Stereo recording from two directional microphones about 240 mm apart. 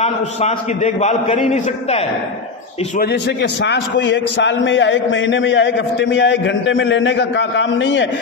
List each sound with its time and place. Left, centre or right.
0.0 s a man's voice: left
3.6 s a man's voice: left